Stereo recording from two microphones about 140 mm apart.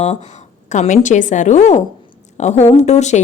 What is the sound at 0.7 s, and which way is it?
Speech, 60° left (ahead or behind).